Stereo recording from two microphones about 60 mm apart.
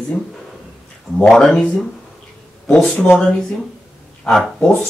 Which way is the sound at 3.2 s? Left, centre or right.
Centre.